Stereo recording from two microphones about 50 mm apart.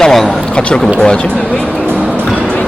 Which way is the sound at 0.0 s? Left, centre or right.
Centre.